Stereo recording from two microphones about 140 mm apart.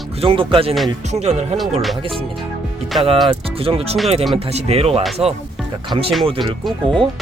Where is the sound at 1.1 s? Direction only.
50° right (ahead or behind).